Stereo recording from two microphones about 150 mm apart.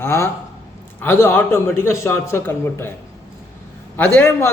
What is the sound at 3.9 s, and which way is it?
Speech, 10° left (ahead or behind).